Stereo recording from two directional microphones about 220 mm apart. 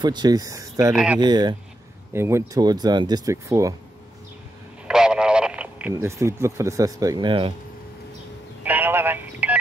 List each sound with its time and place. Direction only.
0.0 s speech: 20° right (ahead or behind)
1.2 s speech: 20° right (ahead or behind)
4.8 s speech: 5° right (ahead or behind); by 7.5 s 20° right (ahead or behind)
8.6 s telephone: 10° right (ahead or behind)